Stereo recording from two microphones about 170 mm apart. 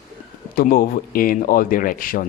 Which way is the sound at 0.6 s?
60° left (ahead or behind).